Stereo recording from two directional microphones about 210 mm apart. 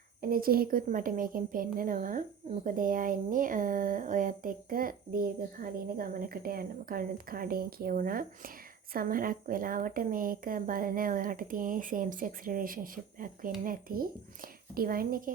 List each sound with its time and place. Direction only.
0.2 s speech: 45° right (ahead or behind)